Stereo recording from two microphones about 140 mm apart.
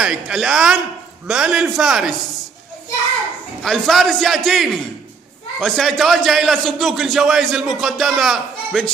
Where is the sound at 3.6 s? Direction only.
Centre (ahead or behind).